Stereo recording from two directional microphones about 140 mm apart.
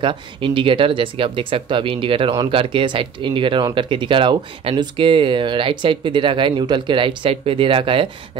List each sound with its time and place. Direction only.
0.0 s speech: 35° right (ahead or behind)